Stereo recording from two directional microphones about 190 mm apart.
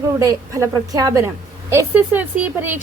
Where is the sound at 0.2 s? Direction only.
20° right (ahead or behind).